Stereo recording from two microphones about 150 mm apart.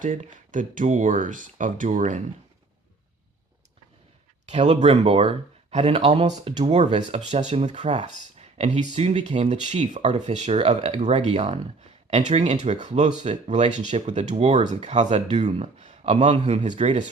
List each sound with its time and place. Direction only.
0.0 s speech: 60° right (ahead or behind)
4.4 s speech: 50° right (ahead or behind)